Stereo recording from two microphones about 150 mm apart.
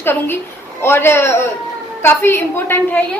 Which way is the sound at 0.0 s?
15° left (ahead or behind).